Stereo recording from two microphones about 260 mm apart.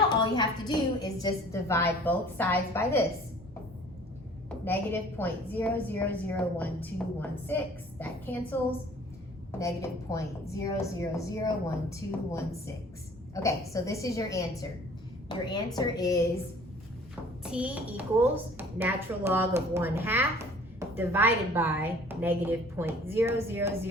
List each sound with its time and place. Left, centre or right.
0.1 s a woman's voice: centre
4.4 s a woman's voice: centre
9.6 s a woman's voice: centre
17.4 s a woman's voice: centre